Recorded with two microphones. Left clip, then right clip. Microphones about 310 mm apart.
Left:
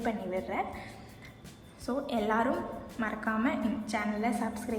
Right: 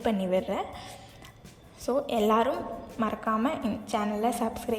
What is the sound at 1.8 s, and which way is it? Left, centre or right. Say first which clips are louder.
A woman's voice: right 6 dB; right.